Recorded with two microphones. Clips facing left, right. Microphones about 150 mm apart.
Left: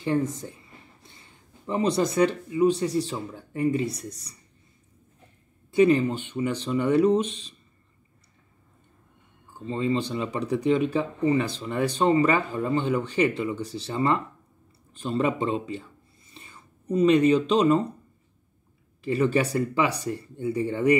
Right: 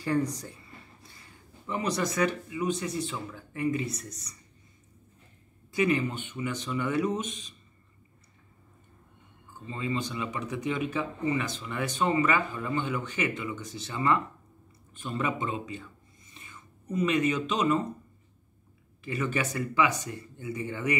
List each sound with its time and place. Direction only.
0.0 s speech: 25° left (ahead or behind)
1.7 s speech: 30° left (ahead or behind)
5.7 s speech: 30° left (ahead or behind)
9.7 s speech: 30° left (ahead or behind)
19.0 s speech: 35° left (ahead or behind)